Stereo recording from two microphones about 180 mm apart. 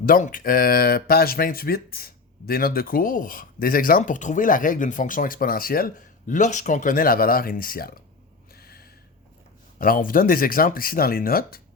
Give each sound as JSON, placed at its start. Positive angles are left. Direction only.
{"t": 0.0, "sound": "speech", "side_deg": 50}
{"t": 8.5, "sound": "gasp", "side_deg": 55}
{"t": 9.7, "sound": "speech", "side_deg": 50}